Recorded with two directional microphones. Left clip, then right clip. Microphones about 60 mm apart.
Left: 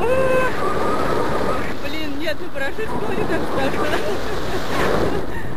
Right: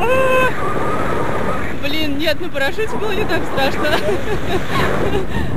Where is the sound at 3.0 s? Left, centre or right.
Right.